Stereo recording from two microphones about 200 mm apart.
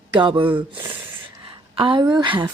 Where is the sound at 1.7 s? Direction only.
25° right (ahead or behind).